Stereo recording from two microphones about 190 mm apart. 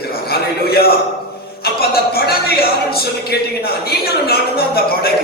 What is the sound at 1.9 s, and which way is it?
Speech, 55° left (ahead or behind).